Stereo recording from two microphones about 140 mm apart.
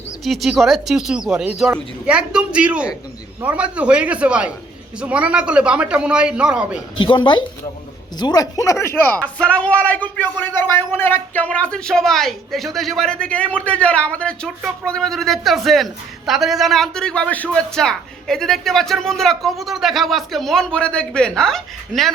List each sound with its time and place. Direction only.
0.3 s a woman's voice: centre (ahead or behind)
7.0 s a woman's voice: 35° left (ahead or behind); by 22.1 s centre (ahead or behind)